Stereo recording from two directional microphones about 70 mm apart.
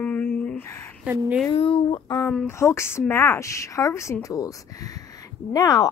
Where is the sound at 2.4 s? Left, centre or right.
Left.